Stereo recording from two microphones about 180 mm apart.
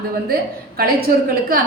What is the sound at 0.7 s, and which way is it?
Speech, 55° right (ahead or behind).